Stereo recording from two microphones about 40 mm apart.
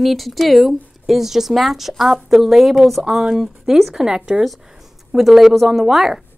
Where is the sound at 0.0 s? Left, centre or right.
Centre.